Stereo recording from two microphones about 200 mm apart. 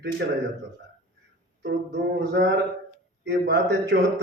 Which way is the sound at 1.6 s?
60° right (ahead or behind).